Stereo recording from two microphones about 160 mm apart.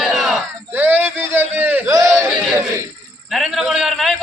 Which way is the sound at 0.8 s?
10° right (ahead or behind).